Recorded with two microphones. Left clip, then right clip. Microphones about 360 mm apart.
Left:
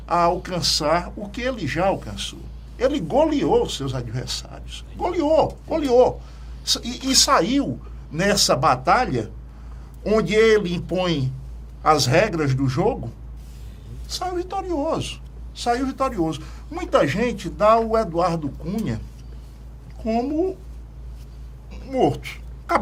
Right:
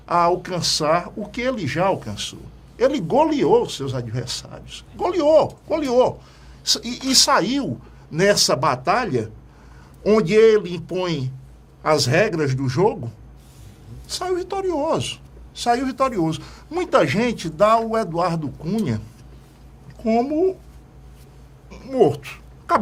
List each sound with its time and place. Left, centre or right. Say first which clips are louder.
0.0 s a man's voice: right 1 dB; right
14.1 s a woman's voice: right 2 dB; right
20.1 s a man's voice: right 4 dB; right
21.7 s a sound: right 3 dB; right